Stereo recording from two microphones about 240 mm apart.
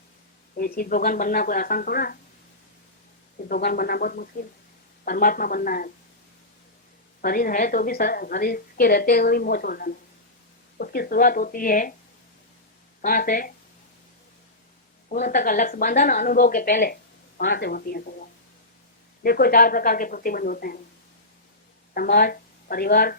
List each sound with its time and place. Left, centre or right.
0.5 s speech: left
3.5 s speech: left
7.2 s speech: left
13.0 s speech: left
15.1 s speech: left
19.2 s speech: left
21.9 s speech: left